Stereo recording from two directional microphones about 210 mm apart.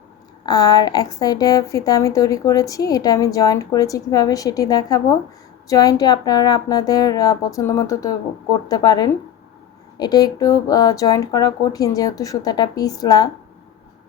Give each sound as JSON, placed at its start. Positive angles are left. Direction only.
{"t": 0.4, "sound": "a woman's voice", "side_deg": 20}